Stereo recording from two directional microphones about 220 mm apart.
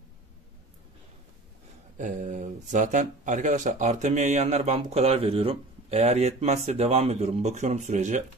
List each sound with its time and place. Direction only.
2.0 s speech: 35° right (ahead or behind)